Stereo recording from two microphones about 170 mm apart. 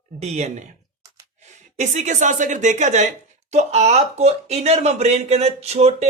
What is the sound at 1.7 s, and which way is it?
A woman's voice, 45° right (ahead or behind).